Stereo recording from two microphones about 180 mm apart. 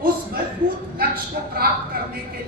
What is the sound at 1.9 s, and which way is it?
Speech, 60° right (ahead or behind).